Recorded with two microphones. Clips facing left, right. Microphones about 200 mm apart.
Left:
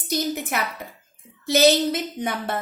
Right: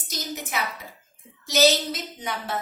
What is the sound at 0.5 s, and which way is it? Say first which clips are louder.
A woman's voice: left 3 dB; 60° left (ahead or behind).